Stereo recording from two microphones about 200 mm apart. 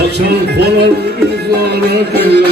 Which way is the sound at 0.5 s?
55° right (ahead or behind).